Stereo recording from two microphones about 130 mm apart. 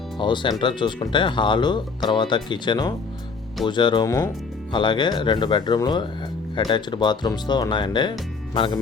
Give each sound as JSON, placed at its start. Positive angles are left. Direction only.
{"t": 0.2, "sound": "speech", "side_deg": 35}